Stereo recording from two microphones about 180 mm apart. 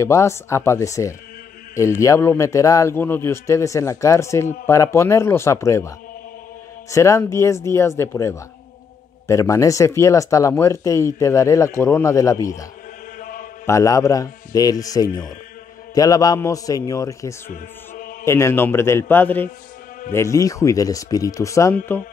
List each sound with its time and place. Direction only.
0.0 s speech: 15° left (ahead or behind)
13.2 s mantra: 50° left (ahead or behind)
13.7 s speech: 15° left (ahead or behind)
17.5 s music: 50° left (ahead or behind)
18.2 s speech: 15° left (ahead or behind)